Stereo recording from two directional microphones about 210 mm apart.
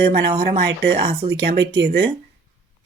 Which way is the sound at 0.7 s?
55° right (ahead or behind).